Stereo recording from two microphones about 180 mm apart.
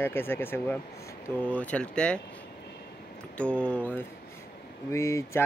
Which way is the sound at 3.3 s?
5° left (ahead or behind).